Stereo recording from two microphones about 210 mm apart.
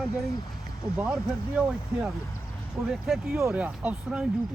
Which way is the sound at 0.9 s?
Centre (ahead or behind).